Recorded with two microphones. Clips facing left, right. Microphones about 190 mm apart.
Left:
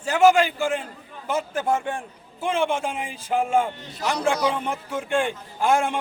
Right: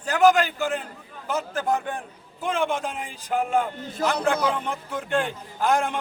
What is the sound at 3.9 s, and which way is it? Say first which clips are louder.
Speech: right 1 dB; 50° right (ahead or behind).